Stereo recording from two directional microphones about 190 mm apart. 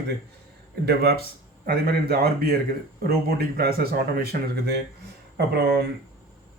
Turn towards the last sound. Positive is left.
turn(degrees=-60)  # may be behind; listen again after turning